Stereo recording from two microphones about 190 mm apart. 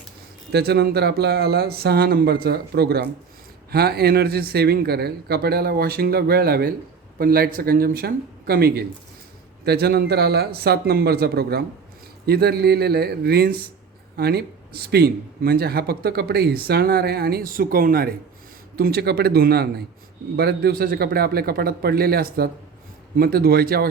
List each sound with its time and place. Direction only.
0.5 s speech: 55° right (ahead or behind)